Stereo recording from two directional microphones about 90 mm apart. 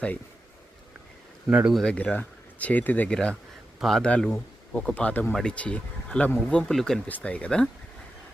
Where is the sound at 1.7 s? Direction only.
10° left (ahead or behind).